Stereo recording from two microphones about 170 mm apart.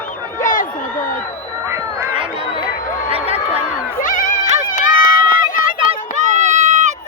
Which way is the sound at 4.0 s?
50° left (ahead or behind).